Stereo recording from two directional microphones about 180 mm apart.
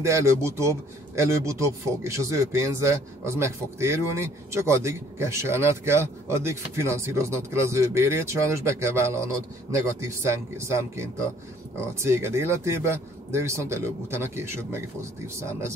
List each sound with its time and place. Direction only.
0.0 s a man's voice: 15° right (ahead or behind)